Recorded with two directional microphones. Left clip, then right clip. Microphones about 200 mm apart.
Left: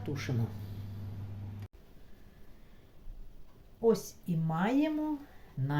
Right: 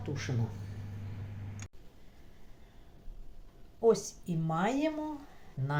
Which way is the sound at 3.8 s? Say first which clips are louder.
Right 2 dB; 10° right (ahead or behind).